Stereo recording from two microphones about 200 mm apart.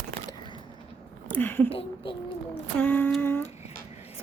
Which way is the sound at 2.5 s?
10° left (ahead or behind).